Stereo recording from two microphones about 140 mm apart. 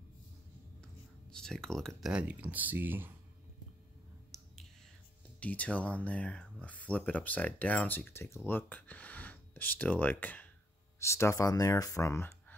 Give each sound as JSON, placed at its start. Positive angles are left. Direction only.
{"t": 1.3, "sound": "speech", "side_deg": 5}
{"t": 4.3, "sound": "finger snapping", "side_deg": 0}
{"t": 5.4, "sound": "speech", "side_deg": 10}